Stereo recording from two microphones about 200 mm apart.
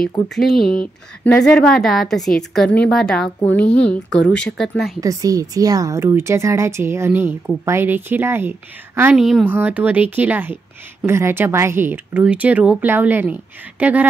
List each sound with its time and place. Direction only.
0.0 s a woman's voice: centre (ahead or behind)
5.0 s a woman's voice: 15° right (ahead or behind)